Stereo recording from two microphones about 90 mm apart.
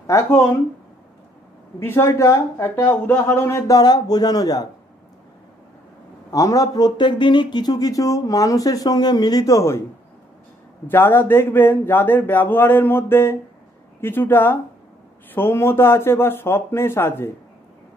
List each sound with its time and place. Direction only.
0.0 s speech: 30° left (ahead or behind)
1.8 s a man's voice: 30° left (ahead or behind)
3.7 s speech: 45° left (ahead or behind)
6.3 s speech: 40° left (ahead or behind)
10.9 s a man's voice: 25° left (ahead or behind)